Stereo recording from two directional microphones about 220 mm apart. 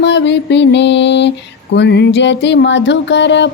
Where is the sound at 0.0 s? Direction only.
50° left (ahead or behind).